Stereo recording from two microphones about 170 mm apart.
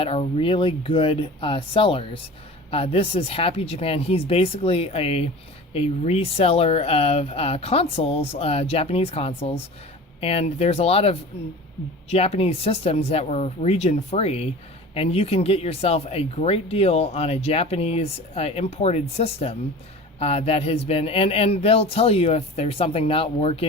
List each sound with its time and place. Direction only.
0.0 s speech: 35° left (ahead or behind)